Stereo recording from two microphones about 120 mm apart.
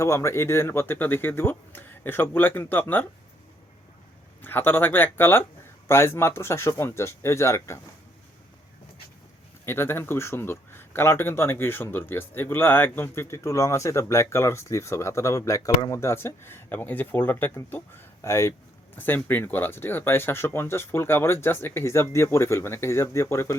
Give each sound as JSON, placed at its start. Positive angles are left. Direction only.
{"t": 0.0, "sound": "speech", "side_deg": 25}
{"t": 4.4, "sound": "speech", "side_deg": 15}
{"t": 9.6, "sound": "speech", "side_deg": 20}